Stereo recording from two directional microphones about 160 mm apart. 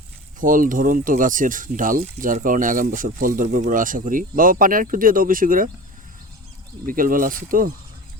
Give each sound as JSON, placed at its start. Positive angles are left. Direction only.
{"t": 0.3, "sound": "speech", "side_deg": -55}
{"t": 6.8, "sound": "speech", "side_deg": -60}